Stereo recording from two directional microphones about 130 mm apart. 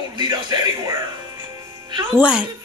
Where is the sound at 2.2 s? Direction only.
10° right (ahead or behind).